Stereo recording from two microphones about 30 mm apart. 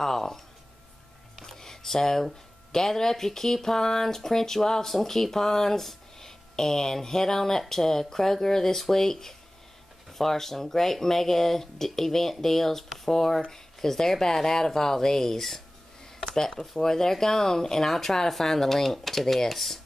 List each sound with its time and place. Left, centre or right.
0.0 s speech: centre
1.4 s speech: centre
16.2 s a sound: centre
16.8 s speech: centre